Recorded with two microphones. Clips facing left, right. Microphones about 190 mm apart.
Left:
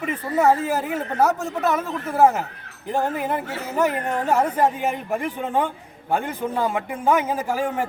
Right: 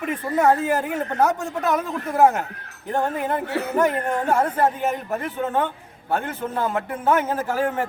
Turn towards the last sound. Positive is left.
turn(degrees=10)  # may be behind; listen again after turning